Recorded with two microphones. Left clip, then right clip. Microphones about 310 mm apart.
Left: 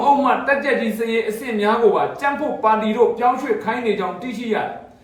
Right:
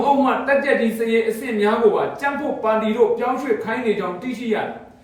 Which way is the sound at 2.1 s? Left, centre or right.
Centre.